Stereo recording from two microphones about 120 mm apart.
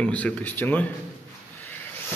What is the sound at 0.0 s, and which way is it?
Speech, 10° left (ahead or behind).